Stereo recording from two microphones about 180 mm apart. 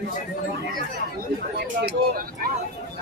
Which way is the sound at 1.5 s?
60° right (ahead or behind).